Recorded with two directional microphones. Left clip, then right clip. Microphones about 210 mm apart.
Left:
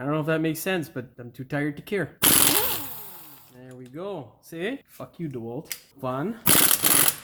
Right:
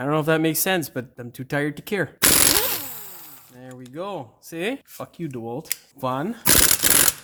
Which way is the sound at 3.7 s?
55° right (ahead or behind).